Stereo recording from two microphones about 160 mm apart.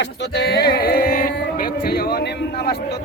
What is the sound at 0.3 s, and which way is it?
Music, 90° left.